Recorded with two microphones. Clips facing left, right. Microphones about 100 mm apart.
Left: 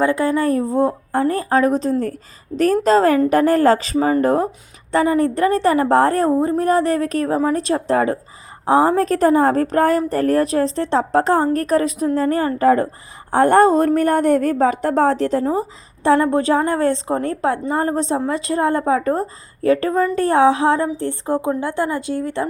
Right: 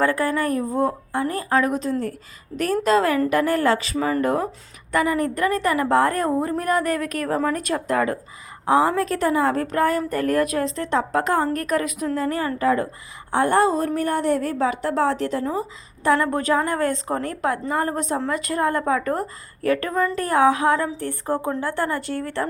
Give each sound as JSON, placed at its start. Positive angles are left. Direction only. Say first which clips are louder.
{"t": 0.0, "sound": "a woman's voice", "louder": "left 4 dB", "side_deg": 20}
{"t": 2.5, "sound": "a woman's voice", "louder": "left 8 dB", "side_deg": 15}
{"t": 2.8, "sound": "a woman's voice", "louder": "left 3 dB", "side_deg": 35}